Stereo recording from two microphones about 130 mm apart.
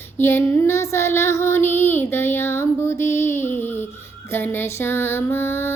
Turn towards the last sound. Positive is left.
turn(degrees=20)  # may be behind; listen again after turning